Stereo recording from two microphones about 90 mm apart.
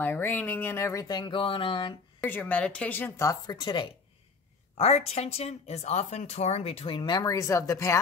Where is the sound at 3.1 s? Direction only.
35° left (ahead or behind); by 3.9 s 60° left (ahead or behind).